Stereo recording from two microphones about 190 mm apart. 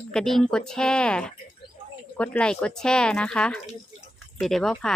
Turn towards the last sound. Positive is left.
turn(degrees=5)  # may be behind; listen again after turning